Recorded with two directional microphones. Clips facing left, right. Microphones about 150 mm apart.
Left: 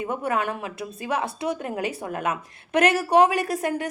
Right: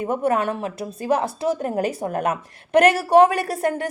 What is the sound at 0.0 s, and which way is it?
A woman's voice, 35° right (ahead or behind).